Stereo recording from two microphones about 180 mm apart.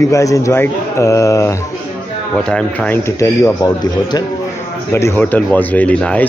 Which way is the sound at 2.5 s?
5° left (ahead or behind).